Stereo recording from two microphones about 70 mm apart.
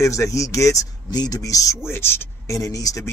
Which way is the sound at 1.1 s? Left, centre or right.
Left.